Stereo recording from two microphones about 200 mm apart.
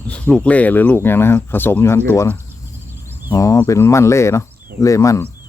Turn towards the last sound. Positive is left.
turn(degrees=15)  # may be behind; listen again after turning